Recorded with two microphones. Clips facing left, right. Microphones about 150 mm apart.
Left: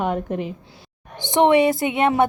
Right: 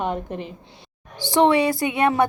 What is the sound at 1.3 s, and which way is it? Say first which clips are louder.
Speech: left 2 dB; 20° left (ahead or behind).